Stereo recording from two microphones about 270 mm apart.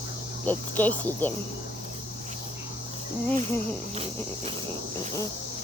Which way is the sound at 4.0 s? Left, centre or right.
Right.